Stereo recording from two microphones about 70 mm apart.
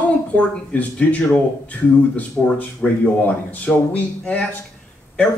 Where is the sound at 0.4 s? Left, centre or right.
Centre.